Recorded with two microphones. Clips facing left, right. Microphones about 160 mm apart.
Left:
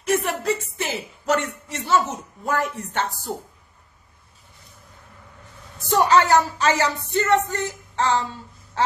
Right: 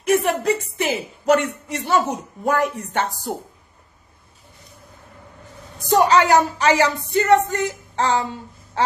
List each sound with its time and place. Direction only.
0.0 s a woman's voice: 15° right (ahead or behind)
5.9 s a woman's voice: 15° right (ahead or behind)